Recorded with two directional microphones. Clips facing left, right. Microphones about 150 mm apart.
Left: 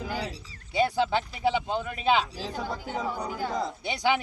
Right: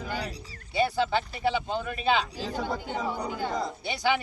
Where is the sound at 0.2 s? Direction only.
20° left (ahead or behind).